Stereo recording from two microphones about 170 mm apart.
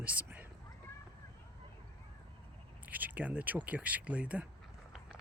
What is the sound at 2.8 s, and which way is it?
Speech, 10° right (ahead or behind).